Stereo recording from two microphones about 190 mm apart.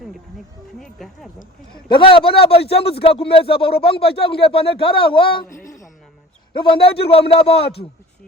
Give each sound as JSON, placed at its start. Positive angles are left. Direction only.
{"t": 0.8, "sound": "speech", "side_deg": 0}
{"t": 1.9, "sound": "speech", "side_deg": 25}
{"t": 3.7, "sound": "speech", "side_deg": 55}
{"t": 4.0, "sound": "speech", "side_deg": 30}
{"t": 5.6, "sound": "music", "side_deg": 15}
{"t": 6.8, "sound": "speech", "side_deg": 30}